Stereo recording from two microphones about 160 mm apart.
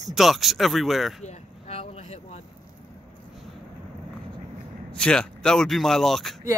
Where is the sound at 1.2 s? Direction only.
40° left (ahead or behind).